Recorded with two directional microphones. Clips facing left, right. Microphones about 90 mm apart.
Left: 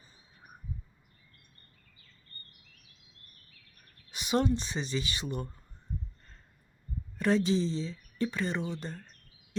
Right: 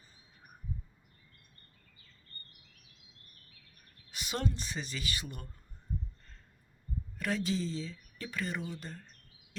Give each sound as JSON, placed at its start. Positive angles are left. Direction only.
{"t": 4.1, "sound": "speech", "side_deg": 20}
{"t": 7.2, "sound": "speech", "side_deg": 25}